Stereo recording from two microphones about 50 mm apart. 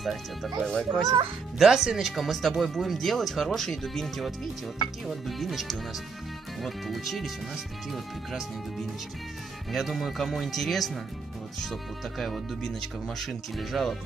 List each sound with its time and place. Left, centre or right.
0.0 s speech: centre
0.7 s speech: centre
1.6 s speech: centre
9.7 s speech: centre